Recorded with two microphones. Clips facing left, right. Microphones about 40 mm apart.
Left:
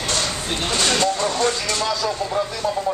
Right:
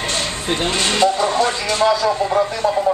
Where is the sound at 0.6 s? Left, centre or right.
Right.